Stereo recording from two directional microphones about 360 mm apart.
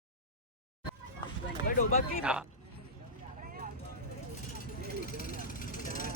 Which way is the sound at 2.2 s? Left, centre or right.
Centre.